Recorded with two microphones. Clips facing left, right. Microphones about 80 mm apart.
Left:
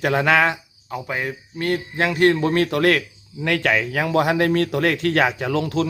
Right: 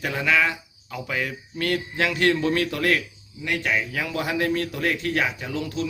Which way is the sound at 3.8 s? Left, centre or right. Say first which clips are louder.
Left 8 dB; left.